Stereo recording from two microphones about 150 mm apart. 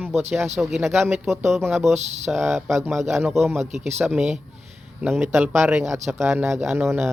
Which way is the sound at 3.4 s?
50° right (ahead or behind).